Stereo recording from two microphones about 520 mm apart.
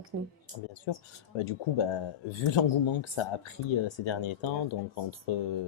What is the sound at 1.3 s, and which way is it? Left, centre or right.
Speech, left.